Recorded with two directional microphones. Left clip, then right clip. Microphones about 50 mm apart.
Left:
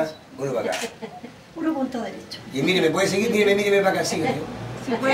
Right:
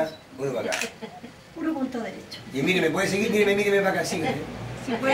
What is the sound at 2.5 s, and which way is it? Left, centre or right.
Speech, left.